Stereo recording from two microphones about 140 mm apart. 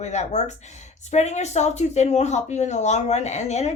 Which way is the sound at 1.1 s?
55° left (ahead or behind).